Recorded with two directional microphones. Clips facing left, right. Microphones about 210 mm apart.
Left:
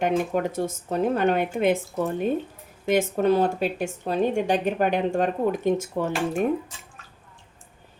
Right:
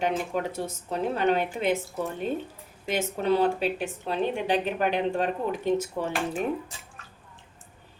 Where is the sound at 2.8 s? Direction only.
50° left (ahead or behind).